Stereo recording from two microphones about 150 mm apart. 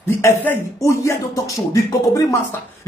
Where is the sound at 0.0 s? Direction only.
15° left (ahead or behind).